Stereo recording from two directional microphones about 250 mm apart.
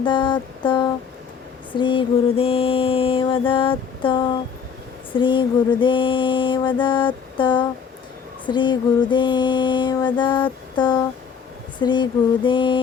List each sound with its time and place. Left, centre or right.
0.0 s mantra: centre
11.8 s speech: centre
12.5 s mantra: centre